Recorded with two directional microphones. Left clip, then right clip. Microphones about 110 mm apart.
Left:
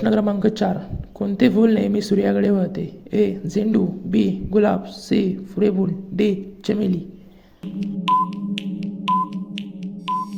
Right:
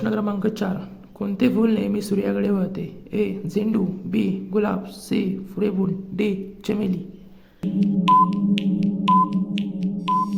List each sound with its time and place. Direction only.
0.0 s a woman's voice: 25° left (ahead or behind); by 7.0 s 10° left (ahead or behind)
7.6 s music: centre (ahead or behind)